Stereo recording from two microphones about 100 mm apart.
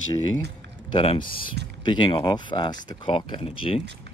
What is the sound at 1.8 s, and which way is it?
Speech, 55° left (ahead or behind).